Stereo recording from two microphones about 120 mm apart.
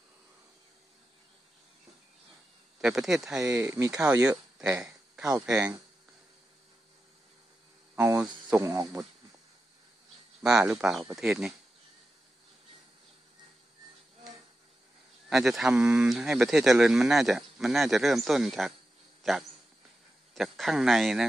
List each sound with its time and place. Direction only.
2.8 s speech: 5° right (ahead or behind)
3.4 s speech: 20° right (ahead or behind)
4.6 s a sound: 5° right (ahead or behind)
5.5 s speech: 10° right (ahead or behind)
7.9 s a sound: 20° right (ahead or behind)
8.5 s speech: 25° right (ahead or behind)
10.4 s speech: 5° right (ahead or behind)
15.2 s speech: centre (ahead or behind)